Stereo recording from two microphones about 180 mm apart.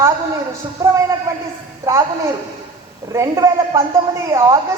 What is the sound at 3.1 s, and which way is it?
Speech, 15° right (ahead or behind).